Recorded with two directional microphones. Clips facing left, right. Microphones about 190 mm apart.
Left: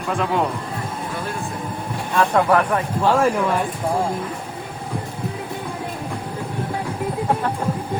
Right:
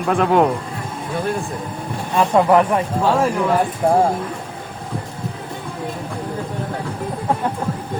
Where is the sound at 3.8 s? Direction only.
55° right (ahead or behind).